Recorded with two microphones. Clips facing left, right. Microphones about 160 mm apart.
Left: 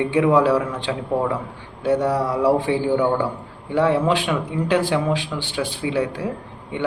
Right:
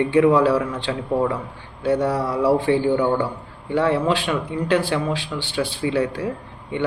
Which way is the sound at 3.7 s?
15° left (ahead or behind).